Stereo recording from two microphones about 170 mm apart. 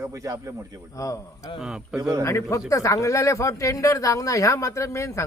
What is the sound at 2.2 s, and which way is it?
A man's voice, 15° left (ahead or behind).